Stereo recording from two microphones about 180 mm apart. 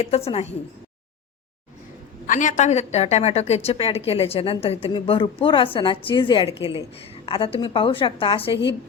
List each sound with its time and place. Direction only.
0.0 s a woman's voice: 35° left (ahead or behind)
2.2 s a woman's voice: 45° left (ahead or behind); by 8.5 s 30° left (ahead or behind)